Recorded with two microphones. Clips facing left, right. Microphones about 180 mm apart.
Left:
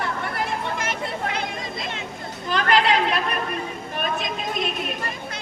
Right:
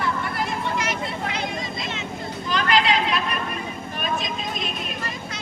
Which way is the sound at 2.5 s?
50° left (ahead or behind).